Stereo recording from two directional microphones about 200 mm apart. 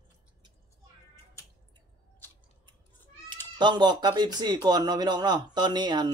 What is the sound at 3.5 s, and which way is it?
Speech, 20° right (ahead or behind).